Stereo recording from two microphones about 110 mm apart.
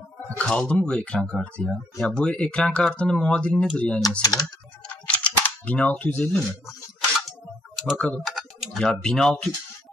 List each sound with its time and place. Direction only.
0.4 s speech: 10° left (ahead or behind)
4.2 s speech: 35° left (ahead or behind)
4.8 s camera: 10° left (ahead or behind)
7.7 s typing: centre (ahead or behind)
8.2 s speech: centre (ahead or behind)